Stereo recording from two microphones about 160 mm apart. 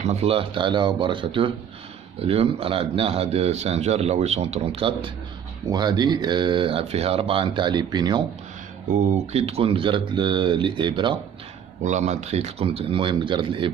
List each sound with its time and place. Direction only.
0.0 s speech: 40° right (ahead or behind)
8.9 s speech: 45° right (ahead or behind)
11.8 s speech: 45° right (ahead or behind); by 13.7 s 30° right (ahead or behind)